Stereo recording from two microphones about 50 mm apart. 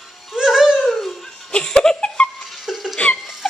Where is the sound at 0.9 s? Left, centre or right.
Centre.